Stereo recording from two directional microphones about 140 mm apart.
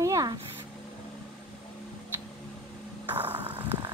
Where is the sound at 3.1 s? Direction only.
10° right (ahead or behind).